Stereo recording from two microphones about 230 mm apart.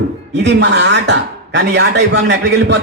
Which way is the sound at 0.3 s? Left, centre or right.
Right.